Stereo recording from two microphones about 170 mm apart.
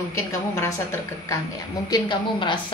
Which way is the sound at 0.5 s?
15° left (ahead or behind).